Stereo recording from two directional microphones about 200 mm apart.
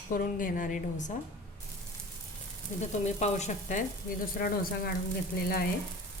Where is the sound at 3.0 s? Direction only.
35° left (ahead or behind).